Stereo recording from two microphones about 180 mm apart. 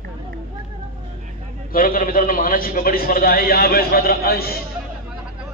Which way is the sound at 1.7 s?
50° left (ahead or behind).